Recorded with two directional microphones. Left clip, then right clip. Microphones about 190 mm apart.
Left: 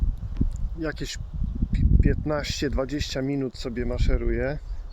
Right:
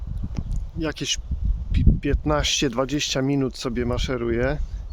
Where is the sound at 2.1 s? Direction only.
15° right (ahead or behind).